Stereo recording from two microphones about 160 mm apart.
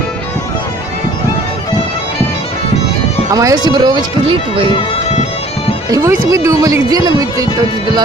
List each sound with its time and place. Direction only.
3.3 s speech: 20° right (ahead or behind)
5.9 s speech: 20° right (ahead or behind)